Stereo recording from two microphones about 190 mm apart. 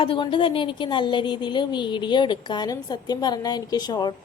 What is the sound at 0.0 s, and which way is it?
Speech, 25° left (ahead or behind).